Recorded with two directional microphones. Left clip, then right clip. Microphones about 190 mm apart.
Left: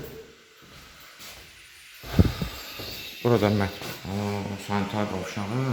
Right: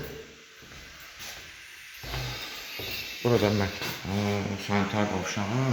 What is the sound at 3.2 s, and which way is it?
Speech, 15° left (ahead or behind).